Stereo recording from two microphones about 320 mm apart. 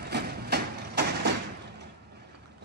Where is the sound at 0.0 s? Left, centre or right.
Right.